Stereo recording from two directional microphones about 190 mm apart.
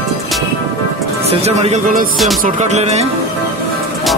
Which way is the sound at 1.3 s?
35° right (ahead or behind).